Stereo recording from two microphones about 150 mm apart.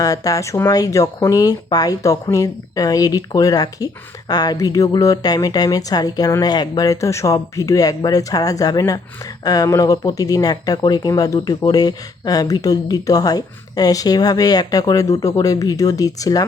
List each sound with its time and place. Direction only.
0.0 s speech: 20° left (ahead or behind)